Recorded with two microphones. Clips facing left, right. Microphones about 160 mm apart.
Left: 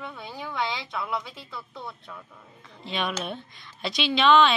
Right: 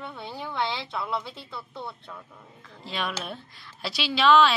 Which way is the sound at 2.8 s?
Centre (ahead or behind).